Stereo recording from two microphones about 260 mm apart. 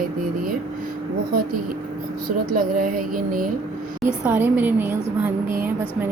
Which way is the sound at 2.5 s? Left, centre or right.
Right.